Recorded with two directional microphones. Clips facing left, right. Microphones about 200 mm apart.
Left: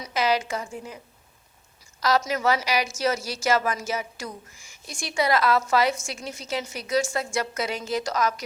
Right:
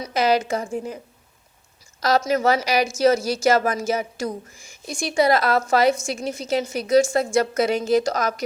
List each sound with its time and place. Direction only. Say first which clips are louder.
0.1 s a woman's voice: right 4 dB; 45° right (ahead or behind)
2.0 s a woman's voice: right 4 dB; 50° right (ahead or behind)